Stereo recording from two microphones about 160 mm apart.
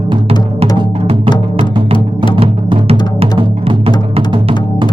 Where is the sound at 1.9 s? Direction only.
30° left (ahead or behind).